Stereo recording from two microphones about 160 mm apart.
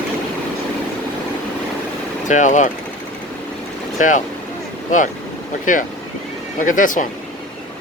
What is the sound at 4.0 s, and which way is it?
Speech, 55° left (ahead or behind).